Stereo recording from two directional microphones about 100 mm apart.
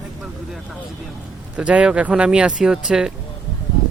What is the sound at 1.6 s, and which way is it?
Speech, 10° right (ahead or behind).